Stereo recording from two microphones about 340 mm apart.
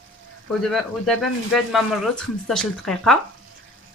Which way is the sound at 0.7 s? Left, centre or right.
Centre.